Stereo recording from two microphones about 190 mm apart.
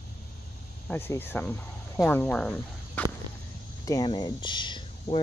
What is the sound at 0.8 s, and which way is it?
Speech, 10° left (ahead or behind).